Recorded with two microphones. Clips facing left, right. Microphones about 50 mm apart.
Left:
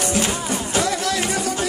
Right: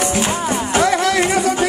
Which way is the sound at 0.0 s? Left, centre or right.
Right.